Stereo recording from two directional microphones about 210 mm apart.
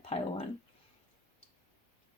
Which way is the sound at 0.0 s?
30° left (ahead or behind).